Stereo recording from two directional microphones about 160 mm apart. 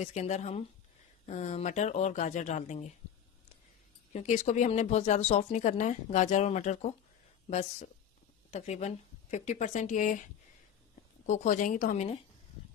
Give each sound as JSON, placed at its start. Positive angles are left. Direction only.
{"t": 0.0, "sound": "speech", "side_deg": 45}
{"t": 4.1, "sound": "speech", "side_deg": 45}
{"t": 11.2, "sound": "speech", "side_deg": 55}